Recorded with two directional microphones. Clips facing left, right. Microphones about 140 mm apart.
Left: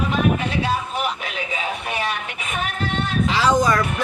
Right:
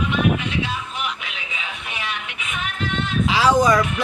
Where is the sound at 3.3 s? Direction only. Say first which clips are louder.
Right 2 dB; 10° right (ahead or behind).